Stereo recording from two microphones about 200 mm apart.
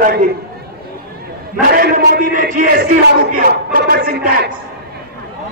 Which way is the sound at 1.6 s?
45° right (ahead or behind).